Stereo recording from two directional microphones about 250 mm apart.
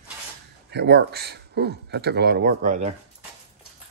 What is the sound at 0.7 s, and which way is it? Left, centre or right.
Speech, right.